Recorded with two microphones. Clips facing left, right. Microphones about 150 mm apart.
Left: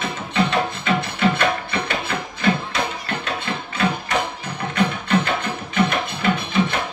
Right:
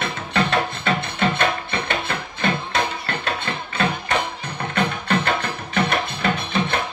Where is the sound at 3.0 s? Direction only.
55° right (ahead or behind).